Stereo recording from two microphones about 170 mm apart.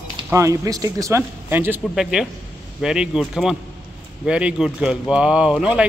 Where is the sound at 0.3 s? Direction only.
20° right (ahead or behind).